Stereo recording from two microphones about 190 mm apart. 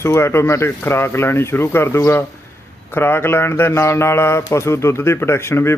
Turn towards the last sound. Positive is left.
turn(degrees=15)  # may be behind; listen again after turning